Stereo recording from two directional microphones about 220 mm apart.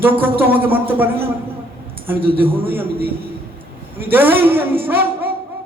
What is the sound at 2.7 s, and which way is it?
A man's voice, 10° right (ahead or behind).